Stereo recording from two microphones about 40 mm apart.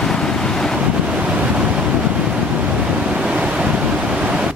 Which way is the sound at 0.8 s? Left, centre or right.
Right.